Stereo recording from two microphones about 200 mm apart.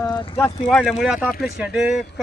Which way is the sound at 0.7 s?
Centre (ahead or behind).